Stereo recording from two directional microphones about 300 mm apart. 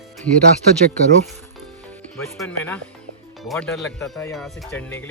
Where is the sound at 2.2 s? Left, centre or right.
Centre.